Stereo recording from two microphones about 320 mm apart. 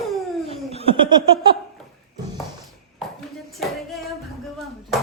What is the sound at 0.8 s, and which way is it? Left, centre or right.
Laughter, centre.